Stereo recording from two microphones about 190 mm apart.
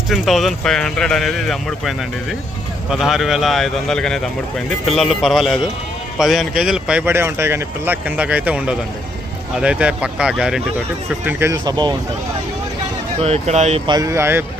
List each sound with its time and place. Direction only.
0.1 s speech: centre (ahead or behind); by 11.9 s 20° right (ahead or behind)
13.2 s speech: 35° right (ahead or behind); by 14.4 s 15° right (ahead or behind)